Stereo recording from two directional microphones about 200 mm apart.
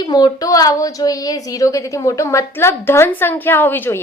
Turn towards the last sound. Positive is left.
turn(degrees=10)  # may be behind; listen again after turning